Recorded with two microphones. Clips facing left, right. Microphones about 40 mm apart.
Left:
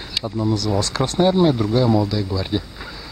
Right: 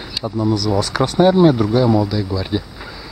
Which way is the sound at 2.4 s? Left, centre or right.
Centre.